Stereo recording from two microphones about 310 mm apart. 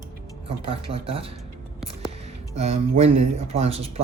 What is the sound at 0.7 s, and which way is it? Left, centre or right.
Speech, centre.